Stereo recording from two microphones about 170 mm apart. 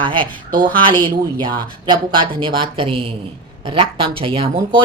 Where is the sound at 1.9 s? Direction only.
30° right (ahead or behind).